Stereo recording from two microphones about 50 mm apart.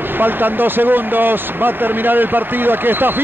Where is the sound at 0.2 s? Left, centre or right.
Right.